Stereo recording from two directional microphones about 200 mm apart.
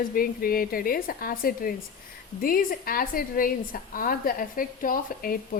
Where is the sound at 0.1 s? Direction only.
45° left (ahead or behind).